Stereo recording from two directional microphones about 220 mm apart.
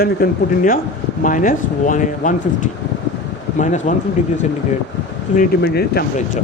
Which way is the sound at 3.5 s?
35° left (ahead or behind).